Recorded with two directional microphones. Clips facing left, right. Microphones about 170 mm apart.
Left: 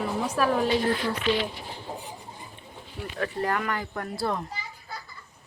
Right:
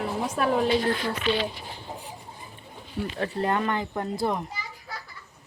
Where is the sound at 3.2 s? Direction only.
25° right (ahead or behind).